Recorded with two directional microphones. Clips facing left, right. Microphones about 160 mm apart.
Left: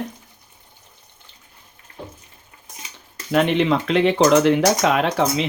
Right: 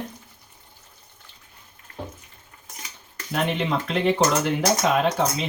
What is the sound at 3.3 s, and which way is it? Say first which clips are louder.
Speech: left 7 dB; 85° left.